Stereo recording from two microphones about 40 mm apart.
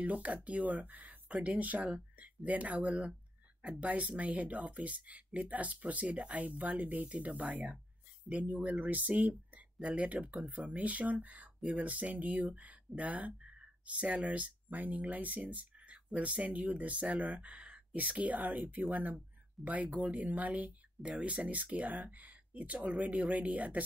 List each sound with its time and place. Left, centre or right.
0.0 s speech: right